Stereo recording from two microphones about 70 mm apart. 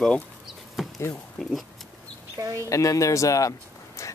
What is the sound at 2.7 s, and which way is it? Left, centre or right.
Speech, left.